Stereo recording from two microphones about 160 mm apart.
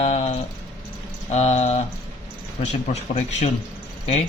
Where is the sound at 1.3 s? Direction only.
40° left (ahead or behind).